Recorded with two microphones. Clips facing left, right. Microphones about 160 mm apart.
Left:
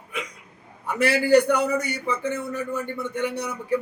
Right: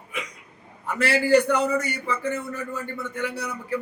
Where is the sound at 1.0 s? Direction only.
15° left (ahead or behind).